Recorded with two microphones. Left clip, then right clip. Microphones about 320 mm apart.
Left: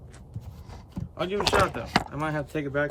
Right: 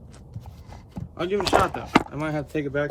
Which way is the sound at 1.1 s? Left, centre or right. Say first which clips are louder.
Right 3 dB; centre.